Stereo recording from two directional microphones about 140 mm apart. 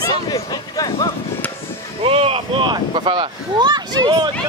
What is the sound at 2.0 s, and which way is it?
Speech, 40° right (ahead or behind).